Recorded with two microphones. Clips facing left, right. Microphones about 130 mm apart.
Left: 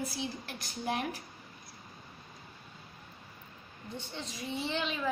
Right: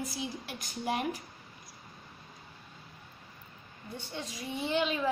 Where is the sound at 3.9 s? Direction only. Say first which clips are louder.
Right 1 dB; 10° right (ahead or behind).